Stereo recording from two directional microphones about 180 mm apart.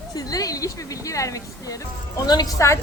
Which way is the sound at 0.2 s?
20° left (ahead or behind).